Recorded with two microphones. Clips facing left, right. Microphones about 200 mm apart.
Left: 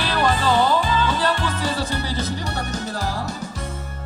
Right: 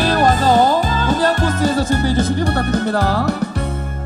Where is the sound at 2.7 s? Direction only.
60° right (ahead or behind).